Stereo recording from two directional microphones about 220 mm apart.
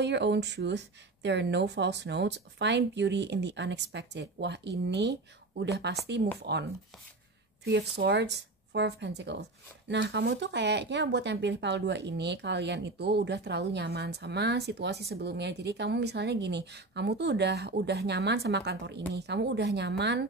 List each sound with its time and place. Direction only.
0.0 s speech: 50° right (ahead or behind)
7.6 s speech: 50° right (ahead or behind)